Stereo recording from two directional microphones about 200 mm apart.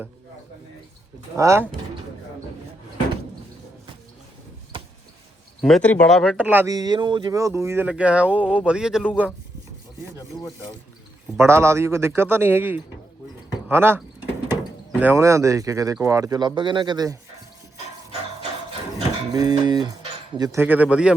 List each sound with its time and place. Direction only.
1.4 s speech: 15° right (ahead or behind)
5.6 s speech: 5° left (ahead or behind)
10.2 s speech: 20° left (ahead or behind)
11.3 s speech: 15° right (ahead or behind)
19.3 s speech: 20° right (ahead or behind)